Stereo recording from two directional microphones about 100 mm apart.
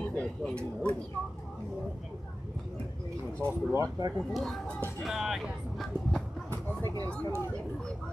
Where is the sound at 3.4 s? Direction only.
25° right (ahead or behind).